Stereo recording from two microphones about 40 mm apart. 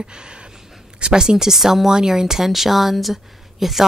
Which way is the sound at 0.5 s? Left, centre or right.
Centre.